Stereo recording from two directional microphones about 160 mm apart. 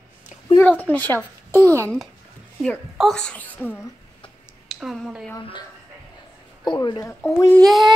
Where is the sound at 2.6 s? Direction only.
5° left (ahead or behind).